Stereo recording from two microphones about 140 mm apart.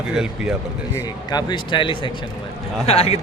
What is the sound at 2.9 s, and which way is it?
Speech, 45° left (ahead or behind).